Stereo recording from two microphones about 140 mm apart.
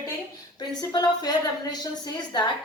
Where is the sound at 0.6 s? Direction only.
30° left (ahead or behind).